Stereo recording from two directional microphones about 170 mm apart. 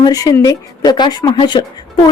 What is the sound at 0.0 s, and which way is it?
Speech, 20° left (ahead or behind).